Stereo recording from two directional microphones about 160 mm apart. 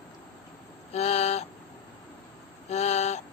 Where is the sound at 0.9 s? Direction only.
40° left (ahead or behind).